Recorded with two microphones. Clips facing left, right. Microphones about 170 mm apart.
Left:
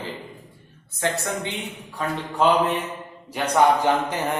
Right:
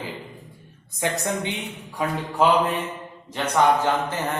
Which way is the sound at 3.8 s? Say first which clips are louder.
Left 2 dB; 15° left (ahead or behind).